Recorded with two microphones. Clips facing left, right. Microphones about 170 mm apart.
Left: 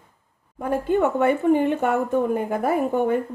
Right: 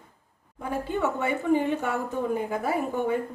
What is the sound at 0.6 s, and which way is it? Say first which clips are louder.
Speech: left 7 dB; 55° left (ahead or behind).